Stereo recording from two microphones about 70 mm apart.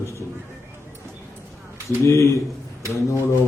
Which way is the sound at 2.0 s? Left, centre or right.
Left.